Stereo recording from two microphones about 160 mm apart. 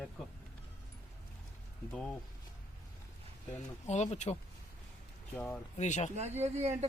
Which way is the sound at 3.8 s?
45° left (ahead or behind).